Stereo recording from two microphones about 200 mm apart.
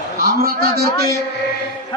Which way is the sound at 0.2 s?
50° right (ahead or behind).